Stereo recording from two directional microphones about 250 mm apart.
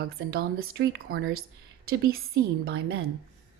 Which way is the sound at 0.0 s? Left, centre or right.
Right.